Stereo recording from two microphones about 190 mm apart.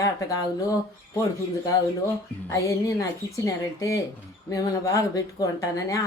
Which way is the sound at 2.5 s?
15° left (ahead or behind).